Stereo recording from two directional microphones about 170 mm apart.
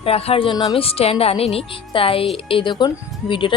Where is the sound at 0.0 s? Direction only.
35° left (ahead or behind).